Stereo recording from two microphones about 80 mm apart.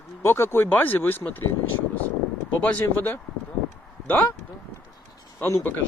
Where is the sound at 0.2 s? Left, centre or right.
Left.